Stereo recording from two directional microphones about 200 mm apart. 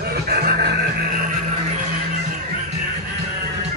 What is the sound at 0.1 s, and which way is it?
Music, 50° right (ahead or behind).